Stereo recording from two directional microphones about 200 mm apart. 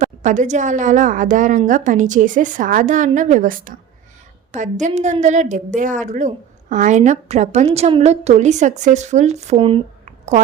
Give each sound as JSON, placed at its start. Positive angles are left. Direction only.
{"t": 0.0, "sound": "a woman's voice", "side_deg": -35}